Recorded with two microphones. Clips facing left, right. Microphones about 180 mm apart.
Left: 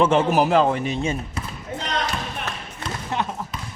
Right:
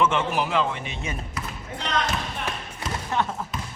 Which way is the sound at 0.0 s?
40° left (ahead or behind).